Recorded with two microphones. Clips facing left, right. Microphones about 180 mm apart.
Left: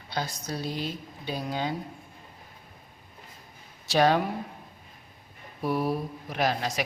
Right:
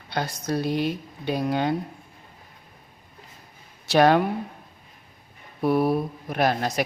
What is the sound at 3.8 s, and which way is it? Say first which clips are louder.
Speech: right 5 dB; 60° right (ahead or behind).